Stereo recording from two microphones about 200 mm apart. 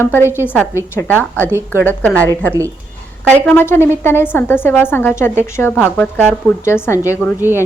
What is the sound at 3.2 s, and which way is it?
A woman's voice, 10° left (ahead or behind).